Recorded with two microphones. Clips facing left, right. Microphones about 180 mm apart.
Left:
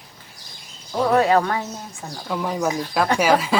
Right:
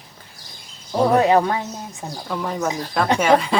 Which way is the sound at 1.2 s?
20° right (ahead or behind).